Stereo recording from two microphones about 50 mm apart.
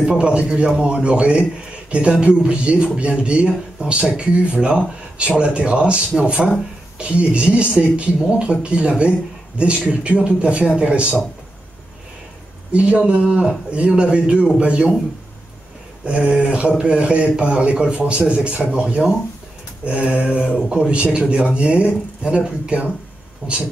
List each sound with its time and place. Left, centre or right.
0.0 s a man's voice: centre
12.7 s a man's voice: right
16.1 s a man's voice: right